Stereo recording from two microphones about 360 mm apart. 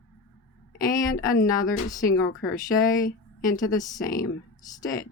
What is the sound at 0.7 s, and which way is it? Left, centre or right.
Speech, left.